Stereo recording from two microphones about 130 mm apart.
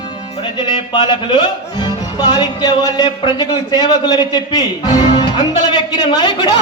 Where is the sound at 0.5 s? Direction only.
40° left (ahead or behind).